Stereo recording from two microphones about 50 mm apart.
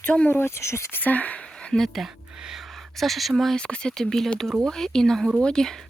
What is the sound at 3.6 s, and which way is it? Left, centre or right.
Speech, centre.